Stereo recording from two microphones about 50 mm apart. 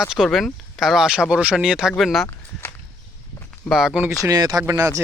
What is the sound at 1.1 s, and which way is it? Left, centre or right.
Speech, centre.